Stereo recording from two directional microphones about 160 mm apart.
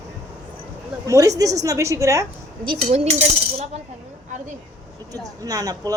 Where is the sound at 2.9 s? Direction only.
45° right (ahead or behind).